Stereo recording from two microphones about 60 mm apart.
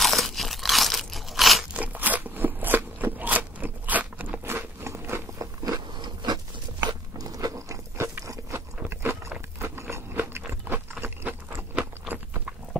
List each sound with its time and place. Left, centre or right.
0.0 s crunch: centre
1.7 s crunch: right
4.5 s biting: right
5.4 s biting: right
7.2 s crunch: right
8.0 s a sound: right
8.8 s biting: right
10.1 s a sound: right
11.8 s crunch: right